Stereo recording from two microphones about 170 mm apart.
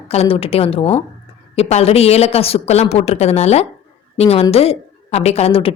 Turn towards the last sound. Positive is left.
turn(degrees=35)  # may be behind; listen again after turning